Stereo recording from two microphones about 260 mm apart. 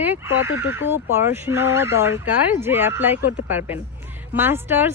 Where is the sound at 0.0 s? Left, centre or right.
Centre.